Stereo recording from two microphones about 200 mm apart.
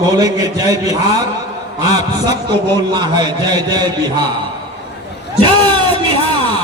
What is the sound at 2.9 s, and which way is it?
A man's voice, 20° right (ahead or behind).